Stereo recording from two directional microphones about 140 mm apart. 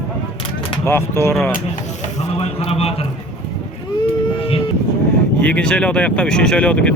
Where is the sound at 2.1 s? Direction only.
45° left (ahead or behind).